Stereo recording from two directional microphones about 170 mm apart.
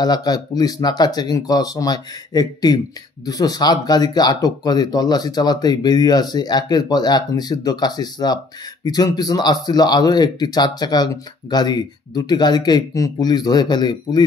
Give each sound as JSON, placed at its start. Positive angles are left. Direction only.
{"t": 0.0, "sound": "speech", "side_deg": 25}